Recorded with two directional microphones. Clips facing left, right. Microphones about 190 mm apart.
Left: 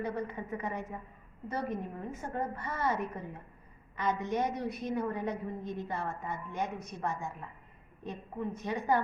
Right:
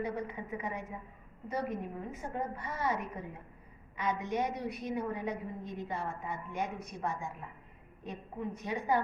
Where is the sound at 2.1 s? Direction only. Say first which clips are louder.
Left 3 dB; 15° right (ahead or behind).